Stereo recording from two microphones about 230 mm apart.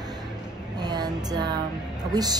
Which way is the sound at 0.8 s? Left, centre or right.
Centre.